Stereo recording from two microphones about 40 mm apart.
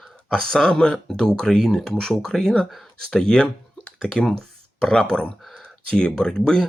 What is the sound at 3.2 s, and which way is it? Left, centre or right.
Speech, centre.